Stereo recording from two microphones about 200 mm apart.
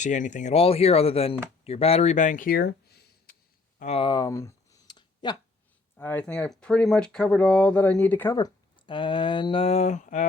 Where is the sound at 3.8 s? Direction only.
30° left (ahead or behind).